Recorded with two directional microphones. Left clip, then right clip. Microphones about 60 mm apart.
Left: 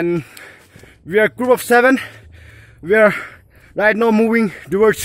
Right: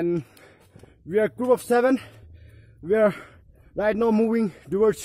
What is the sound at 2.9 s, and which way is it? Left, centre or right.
A man's voice, centre.